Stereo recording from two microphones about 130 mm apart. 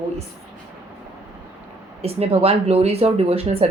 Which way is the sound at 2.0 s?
50° right (ahead or behind).